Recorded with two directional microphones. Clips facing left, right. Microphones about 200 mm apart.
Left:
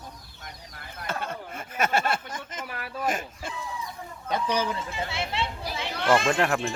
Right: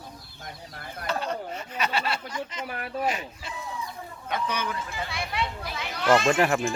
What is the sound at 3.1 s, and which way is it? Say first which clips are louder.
Speech: left 1 dB; 50° left (ahead or behind).